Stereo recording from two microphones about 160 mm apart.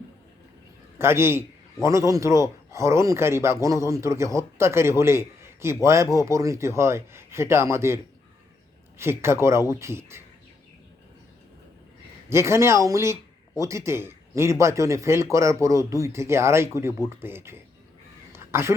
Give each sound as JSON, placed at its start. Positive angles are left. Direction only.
{"t": 0.9, "sound": "a man's voice", "side_deg": -15}
{"t": 9.0, "sound": "a man's voice", "side_deg": -15}
{"t": 12.3, "sound": "a man's voice", "side_deg": -15}
{"t": 18.3, "sound": "a sound", "side_deg": -15}